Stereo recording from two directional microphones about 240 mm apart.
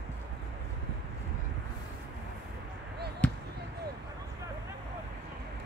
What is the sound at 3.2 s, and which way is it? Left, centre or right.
Basketball bounce, centre.